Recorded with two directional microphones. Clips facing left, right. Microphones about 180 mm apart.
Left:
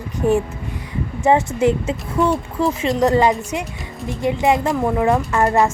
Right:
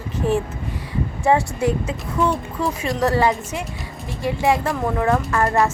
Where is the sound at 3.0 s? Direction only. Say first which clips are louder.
Left 3 dB; 20° left (ahead or behind).